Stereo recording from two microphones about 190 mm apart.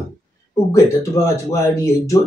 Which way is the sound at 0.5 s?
15° left (ahead or behind).